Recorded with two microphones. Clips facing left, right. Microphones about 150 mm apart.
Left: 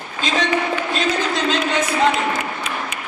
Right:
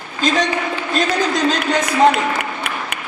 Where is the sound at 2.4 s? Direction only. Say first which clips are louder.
Right 1 dB; 65° right (ahead or behind).